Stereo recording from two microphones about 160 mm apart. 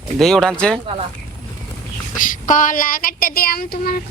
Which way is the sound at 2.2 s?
55° left (ahead or behind).